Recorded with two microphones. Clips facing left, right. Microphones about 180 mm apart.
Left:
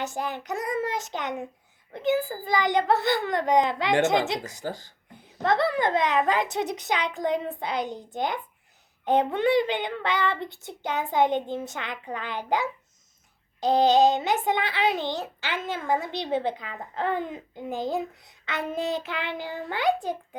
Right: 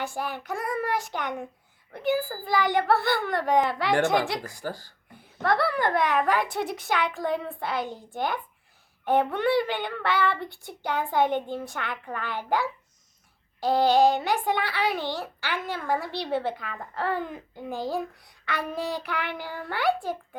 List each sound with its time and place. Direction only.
0.0 s a child's voice: 20° left (ahead or behind)